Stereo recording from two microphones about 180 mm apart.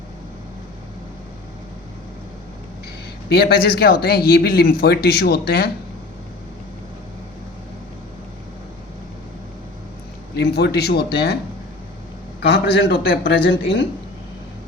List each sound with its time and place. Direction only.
3.2 s speech: 60° left (ahead or behind)
10.3 s speech: 65° left (ahead or behind)
12.4 s a man's voice: 65° left (ahead or behind)